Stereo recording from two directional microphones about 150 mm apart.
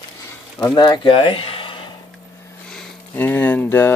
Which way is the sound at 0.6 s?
30° left (ahead or behind).